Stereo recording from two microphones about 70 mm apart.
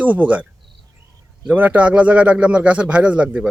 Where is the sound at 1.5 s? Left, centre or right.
Right.